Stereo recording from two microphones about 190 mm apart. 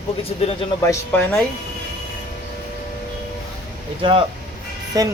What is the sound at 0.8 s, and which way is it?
Speech, 15° left (ahead or behind).